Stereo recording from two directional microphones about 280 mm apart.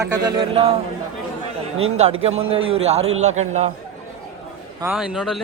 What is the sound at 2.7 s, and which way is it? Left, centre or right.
A man's voice, right.